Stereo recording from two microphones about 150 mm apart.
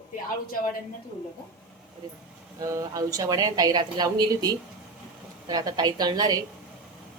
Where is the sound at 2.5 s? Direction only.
20° right (ahead or behind).